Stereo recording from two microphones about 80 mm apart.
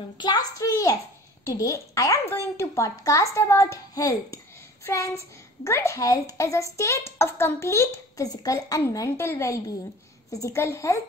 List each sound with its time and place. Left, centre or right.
0.2 s a child's voice: left
8.3 s a child's voice: left
8.9 s a child's voice: left
10.6 s speech: left